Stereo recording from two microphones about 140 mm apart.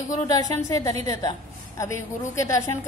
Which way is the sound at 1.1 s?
25° left (ahead or behind).